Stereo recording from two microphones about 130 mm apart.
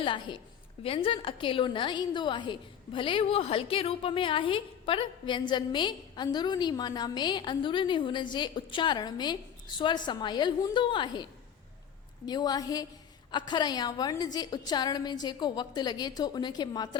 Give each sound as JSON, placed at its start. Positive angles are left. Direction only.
{"t": 0.0, "sound": "a woman's voice", "side_deg": 40}